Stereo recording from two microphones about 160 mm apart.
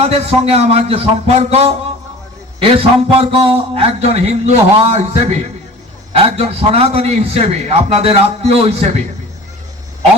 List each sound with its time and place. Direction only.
0.0 s a man's voice: 40° right (ahead or behind)